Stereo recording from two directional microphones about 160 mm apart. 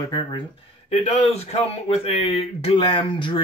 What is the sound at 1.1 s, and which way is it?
A man's voice, 40° left (ahead or behind).